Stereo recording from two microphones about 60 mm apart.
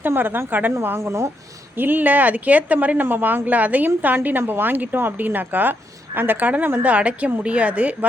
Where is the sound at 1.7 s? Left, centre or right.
Right.